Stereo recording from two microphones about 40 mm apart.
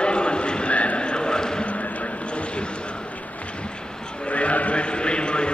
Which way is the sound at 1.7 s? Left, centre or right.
Left.